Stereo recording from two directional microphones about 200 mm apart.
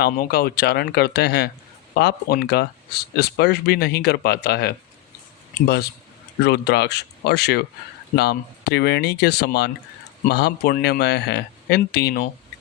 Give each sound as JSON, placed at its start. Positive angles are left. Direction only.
{"t": 0.0, "sound": "speech", "side_deg": 50}